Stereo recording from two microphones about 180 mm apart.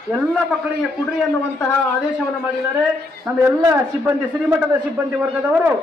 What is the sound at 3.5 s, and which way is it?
A woman's voice, 10° right (ahead or behind).